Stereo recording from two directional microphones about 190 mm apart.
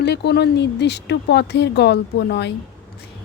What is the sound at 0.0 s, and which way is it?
Speech, 60° left (ahead or behind).